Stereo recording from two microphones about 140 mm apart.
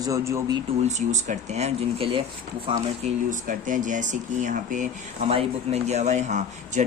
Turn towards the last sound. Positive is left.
turn(degrees=-55)  # may be behind; listen again after turning